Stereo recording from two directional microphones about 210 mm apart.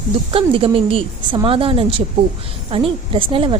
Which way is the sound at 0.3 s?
25° right (ahead or behind).